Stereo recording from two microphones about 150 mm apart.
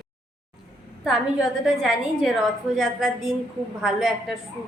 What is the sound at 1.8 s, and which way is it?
A woman's voice, 5° right (ahead or behind).